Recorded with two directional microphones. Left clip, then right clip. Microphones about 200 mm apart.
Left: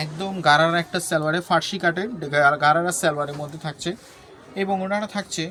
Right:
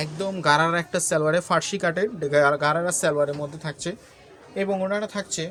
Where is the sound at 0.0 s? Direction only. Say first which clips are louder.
Left 2 dB; 40° right (ahead or behind).